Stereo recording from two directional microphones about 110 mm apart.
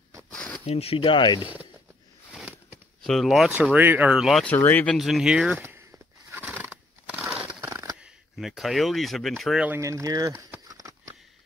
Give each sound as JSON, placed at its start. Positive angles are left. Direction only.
{"t": 0.3, "sound": "a sound", "side_deg": 10}
{"t": 0.7, "sound": "speech", "side_deg": 65}
{"t": 1.4, "sound": "speech", "side_deg": -15}
{"t": 3.0, "sound": "speech", "side_deg": 0}
{"t": 3.7, "sound": "speech", "side_deg": -15}
{"t": 4.2, "sound": "speech", "side_deg": 0}
{"t": 4.5, "sound": "speech", "side_deg": 15}
{"t": 4.9, "sound": "speech", "side_deg": 0}
{"t": 5.6, "sound": "a sound", "side_deg": -20}
{"t": 7.6, "sound": "a sound", "side_deg": -30}
{"t": 8.0, "sound": "speech", "side_deg": 0}
{"t": 9.8, "sound": "speech", "side_deg": -30}
{"t": 10.7, "sound": "sniff", "side_deg": -30}